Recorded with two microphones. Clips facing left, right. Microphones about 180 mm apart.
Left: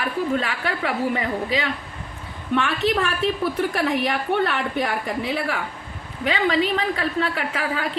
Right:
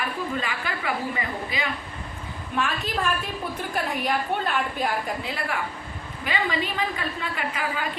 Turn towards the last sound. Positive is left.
turn(degrees=80)